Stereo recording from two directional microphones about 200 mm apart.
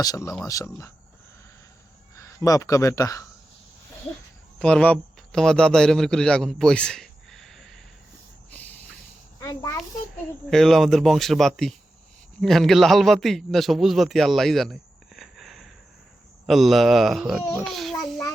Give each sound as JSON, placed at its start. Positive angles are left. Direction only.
{"t": 0.0, "sound": "speech", "side_deg": 15}
{"t": 2.1, "sound": "speech", "side_deg": 15}
{"t": 4.6, "sound": "a man's voice", "side_deg": 5}
{"t": 9.4, "sound": "a child's voice", "side_deg": 15}
{"t": 10.5, "sound": "a man's voice", "side_deg": 0}